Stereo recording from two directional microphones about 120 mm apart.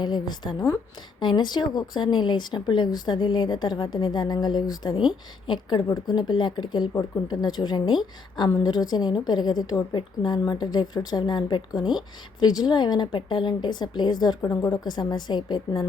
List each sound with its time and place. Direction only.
0.0 s a woman's voice: 35° left (ahead or behind)